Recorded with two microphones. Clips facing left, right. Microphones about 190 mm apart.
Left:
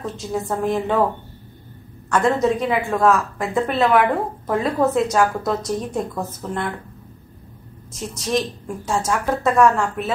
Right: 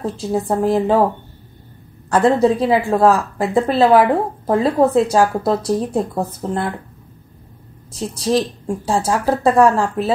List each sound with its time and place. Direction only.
0.0 s a woman's voice: 35° right (ahead or behind)
2.0 s a woman's voice: 30° right (ahead or behind)
7.9 s a woman's voice: 35° right (ahead or behind)